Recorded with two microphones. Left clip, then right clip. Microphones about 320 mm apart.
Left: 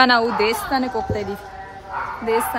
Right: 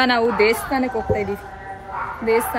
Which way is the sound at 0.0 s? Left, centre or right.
Centre.